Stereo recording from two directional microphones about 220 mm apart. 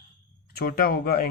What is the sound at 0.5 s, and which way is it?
Speech, 40° left (ahead or behind).